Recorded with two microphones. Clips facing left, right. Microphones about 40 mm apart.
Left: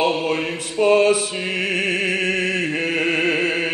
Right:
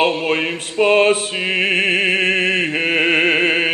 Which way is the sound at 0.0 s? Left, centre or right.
Right.